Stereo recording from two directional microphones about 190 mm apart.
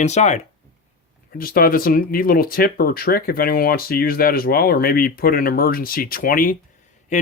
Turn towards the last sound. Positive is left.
turn(degrees=40)  # may be behind; listen again after turning